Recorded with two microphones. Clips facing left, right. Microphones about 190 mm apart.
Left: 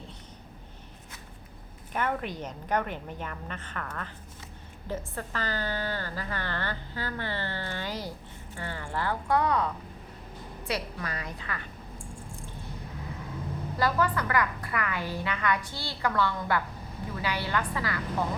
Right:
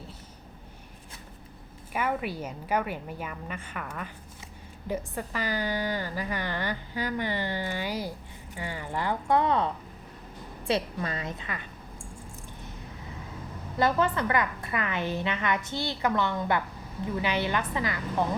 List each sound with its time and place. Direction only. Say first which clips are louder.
1.9 s a woman's voice: right 1 dB; 10° right (ahead or behind); by 9.6 s 25° right (ahead or behind)
10.7 s a woman's voice: right 5 dB; 25° right (ahead or behind)
13.7 s a woman's voice: right 2 dB; 25° right (ahead or behind)